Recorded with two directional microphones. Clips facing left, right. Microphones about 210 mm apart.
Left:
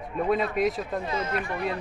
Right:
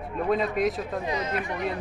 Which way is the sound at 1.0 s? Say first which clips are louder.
Even; 15° right (ahead or behind).